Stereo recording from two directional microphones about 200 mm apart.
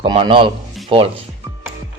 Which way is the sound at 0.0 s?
25° right (ahead or behind).